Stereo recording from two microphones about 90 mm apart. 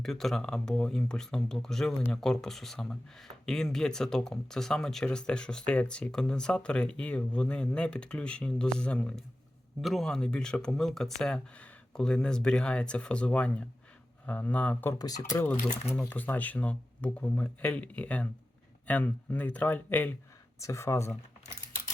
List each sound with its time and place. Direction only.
0.0 s speech: 5° left (ahead or behind)
9.8 s speech: centre (ahead or behind)
14.9 s speech: 45° left (ahead or behind)
15.2 s speech: 30° left (ahead or behind)
20.6 s speech: 35° left (ahead or behind)